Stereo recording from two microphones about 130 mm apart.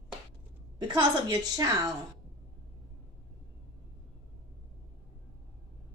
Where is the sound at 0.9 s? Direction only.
30° right (ahead or behind).